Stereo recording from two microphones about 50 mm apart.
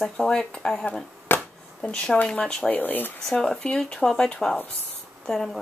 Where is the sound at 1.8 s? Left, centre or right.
Centre.